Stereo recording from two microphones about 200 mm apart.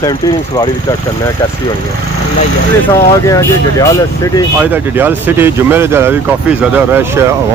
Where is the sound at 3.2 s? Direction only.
15° left (ahead or behind).